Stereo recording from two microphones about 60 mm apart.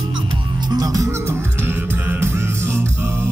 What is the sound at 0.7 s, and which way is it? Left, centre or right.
Music, right.